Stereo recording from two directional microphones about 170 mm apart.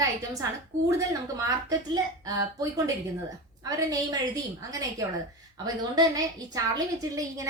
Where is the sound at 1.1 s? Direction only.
20° right (ahead or behind).